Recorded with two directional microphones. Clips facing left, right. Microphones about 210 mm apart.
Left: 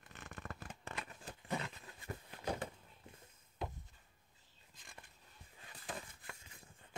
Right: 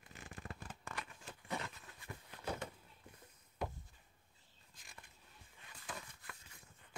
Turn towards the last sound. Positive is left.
turn(degrees=30)  # may be behind; listen again after turning